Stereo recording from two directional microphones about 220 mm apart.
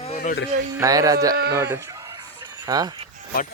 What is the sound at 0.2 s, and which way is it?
Speech, 45° left (ahead or behind).